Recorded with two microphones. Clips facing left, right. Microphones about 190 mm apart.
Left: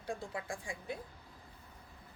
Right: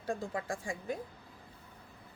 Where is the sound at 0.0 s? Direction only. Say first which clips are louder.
Right 4 dB; 40° right (ahead or behind).